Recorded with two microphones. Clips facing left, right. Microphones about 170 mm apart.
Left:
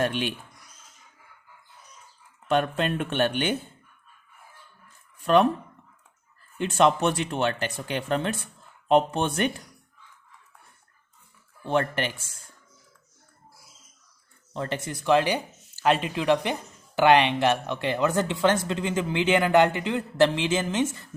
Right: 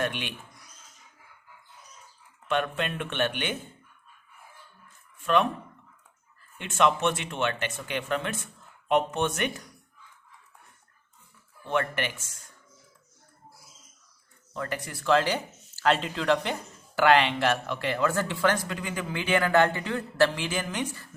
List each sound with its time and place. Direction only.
0.0 s speech: 35° left (ahead or behind)
2.5 s speech: 35° left (ahead or behind)
5.2 s speech: 35° left (ahead or behind)
6.6 s speech: 35° left (ahead or behind)
11.6 s speech: 35° left (ahead or behind)
14.5 s speech: 25° left (ahead or behind)